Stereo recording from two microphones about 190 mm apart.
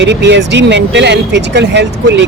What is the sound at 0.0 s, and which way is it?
Speech, 65° right (ahead or behind).